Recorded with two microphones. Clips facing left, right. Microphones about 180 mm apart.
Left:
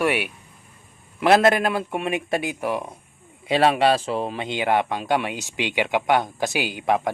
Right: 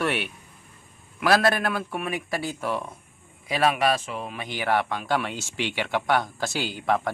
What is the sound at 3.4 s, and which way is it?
Speech, 30° left (ahead or behind).